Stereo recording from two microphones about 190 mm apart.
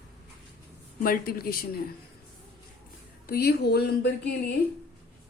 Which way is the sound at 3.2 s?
55° left (ahead or behind).